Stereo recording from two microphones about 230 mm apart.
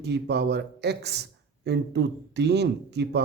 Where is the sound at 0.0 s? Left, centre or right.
Right.